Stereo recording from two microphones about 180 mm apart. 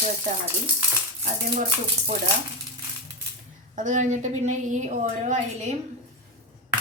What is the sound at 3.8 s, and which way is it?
A woman's voice, 45° right (ahead or behind).